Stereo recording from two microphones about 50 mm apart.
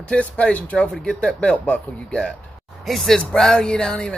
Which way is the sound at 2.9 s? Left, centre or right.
Centre.